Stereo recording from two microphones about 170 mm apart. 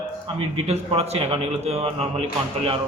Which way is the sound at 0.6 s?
40° right (ahead or behind).